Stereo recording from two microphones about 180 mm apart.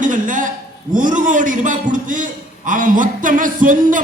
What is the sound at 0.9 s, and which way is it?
A man's voice, 45° right (ahead or behind).